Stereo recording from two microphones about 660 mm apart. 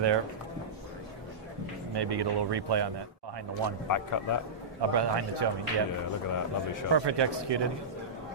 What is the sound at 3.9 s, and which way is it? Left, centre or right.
Speech, left.